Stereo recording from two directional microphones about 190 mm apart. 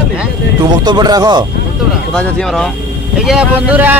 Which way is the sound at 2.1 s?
5° left (ahead or behind).